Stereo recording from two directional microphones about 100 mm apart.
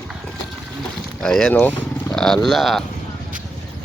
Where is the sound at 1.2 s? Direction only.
5° left (ahead or behind).